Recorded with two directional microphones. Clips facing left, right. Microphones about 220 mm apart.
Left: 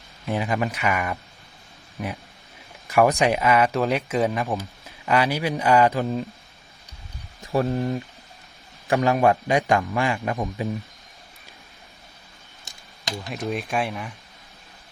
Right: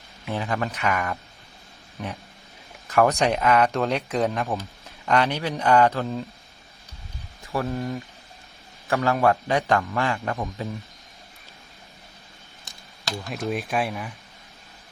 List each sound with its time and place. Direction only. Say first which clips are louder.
0.3 s a man's voice: left 3 dB; 15° left (ahead or behind)
7.5 s speech: left 4 dB; 25° left (ahead or behind)
8.9 s a man's voice: left 2 dB; 15° left (ahead or behind)
13.3 s speech: even; centre (ahead or behind)